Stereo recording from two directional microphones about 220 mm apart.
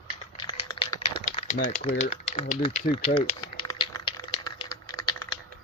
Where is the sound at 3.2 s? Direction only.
20° left (ahead or behind).